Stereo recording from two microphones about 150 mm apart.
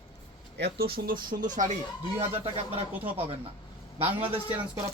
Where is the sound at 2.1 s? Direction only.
40° right (ahead or behind).